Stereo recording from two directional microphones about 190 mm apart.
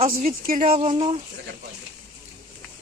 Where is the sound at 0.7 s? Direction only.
30° right (ahead or behind).